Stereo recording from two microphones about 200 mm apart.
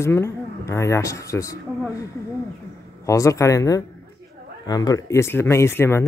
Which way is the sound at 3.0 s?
15° left (ahead or behind).